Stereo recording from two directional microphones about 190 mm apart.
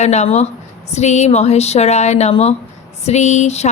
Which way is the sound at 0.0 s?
35° left (ahead or behind).